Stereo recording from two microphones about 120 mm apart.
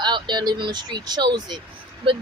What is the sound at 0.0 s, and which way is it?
A woman's voice, 35° right (ahead or behind).